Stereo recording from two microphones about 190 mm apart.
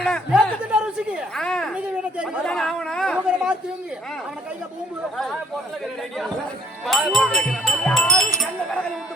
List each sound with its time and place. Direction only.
0.0 s speech: centre (ahead or behind)
5.1 s speech: centre (ahead or behind)
6.8 s speech: centre (ahead or behind)